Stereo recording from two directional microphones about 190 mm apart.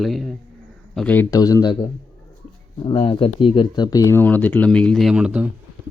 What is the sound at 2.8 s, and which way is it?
Speech, 25° left (ahead or behind).